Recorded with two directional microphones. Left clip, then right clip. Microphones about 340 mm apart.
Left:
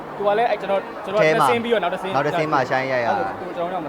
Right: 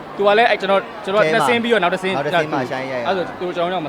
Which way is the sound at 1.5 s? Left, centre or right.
Right.